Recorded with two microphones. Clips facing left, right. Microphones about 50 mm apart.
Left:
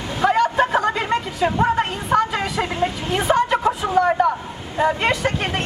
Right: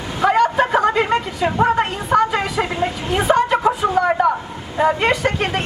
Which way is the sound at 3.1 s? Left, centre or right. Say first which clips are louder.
Right 3 dB; centre.